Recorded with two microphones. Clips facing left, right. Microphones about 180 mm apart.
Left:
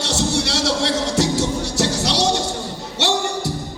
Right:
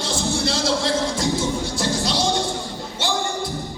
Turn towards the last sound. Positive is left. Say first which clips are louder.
# left 3 dB
turn(degrees=75)  # may be behind; listen again after turning